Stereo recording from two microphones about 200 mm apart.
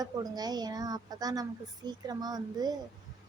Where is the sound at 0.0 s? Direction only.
20° right (ahead or behind).